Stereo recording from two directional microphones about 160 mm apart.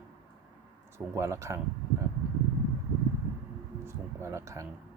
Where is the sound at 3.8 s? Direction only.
15° right (ahead or behind).